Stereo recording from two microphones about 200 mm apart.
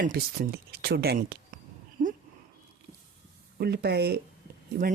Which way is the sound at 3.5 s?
55° right (ahead or behind).